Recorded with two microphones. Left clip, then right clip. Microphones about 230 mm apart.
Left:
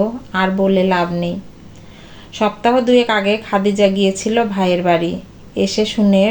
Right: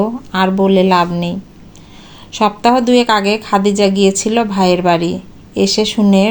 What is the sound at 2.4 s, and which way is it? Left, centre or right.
Speech, right.